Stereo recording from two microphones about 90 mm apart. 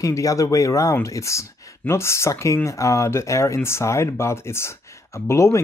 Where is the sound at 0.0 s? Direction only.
40° left (ahead or behind).